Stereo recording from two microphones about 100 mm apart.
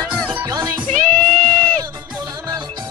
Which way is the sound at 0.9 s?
15° left (ahead or behind).